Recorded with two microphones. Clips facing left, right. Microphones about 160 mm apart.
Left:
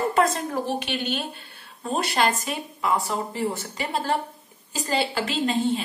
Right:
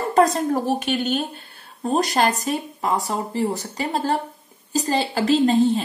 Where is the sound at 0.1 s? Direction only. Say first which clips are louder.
Right 5 dB; 40° right (ahead or behind).